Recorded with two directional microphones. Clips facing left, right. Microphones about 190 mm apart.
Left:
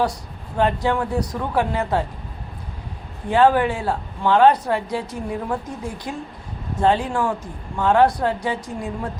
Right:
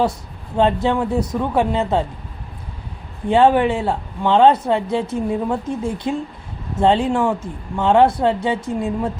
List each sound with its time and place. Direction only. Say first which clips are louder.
0.5 s speech: right 3 dB; 20° right (ahead or behind)
3.2 s speech: right 3 dB; 25° right (ahead or behind)